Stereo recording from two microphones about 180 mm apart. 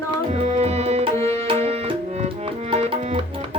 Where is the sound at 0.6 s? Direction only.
35° right (ahead or behind).